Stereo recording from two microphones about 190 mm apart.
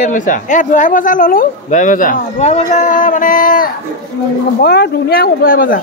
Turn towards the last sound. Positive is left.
turn(degrees=45)  # may be behind; listen again after turning